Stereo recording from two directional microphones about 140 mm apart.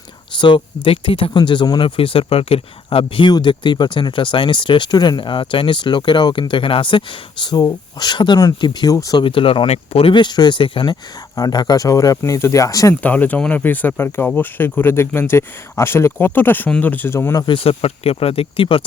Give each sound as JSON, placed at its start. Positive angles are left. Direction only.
{"t": 0.3, "sound": "speech", "side_deg": 35}
{"t": 9.2, "sound": "speech", "side_deg": 40}
{"t": 12.9, "sound": "speech", "side_deg": 10}
{"t": 17.4, "sound": "speech", "side_deg": 40}